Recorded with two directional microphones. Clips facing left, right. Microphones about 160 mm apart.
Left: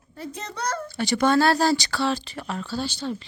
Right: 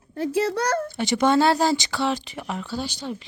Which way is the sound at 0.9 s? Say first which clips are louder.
Left 1 dB; 20° right (ahead or behind).